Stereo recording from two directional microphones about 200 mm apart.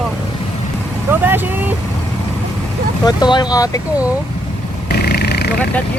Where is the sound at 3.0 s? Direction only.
20° left (ahead or behind).